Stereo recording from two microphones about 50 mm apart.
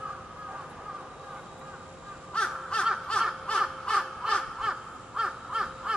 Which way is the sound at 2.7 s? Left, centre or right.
Left.